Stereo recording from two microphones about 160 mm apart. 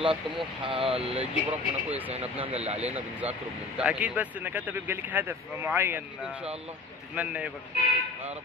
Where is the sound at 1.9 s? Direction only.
10° right (ahead or behind).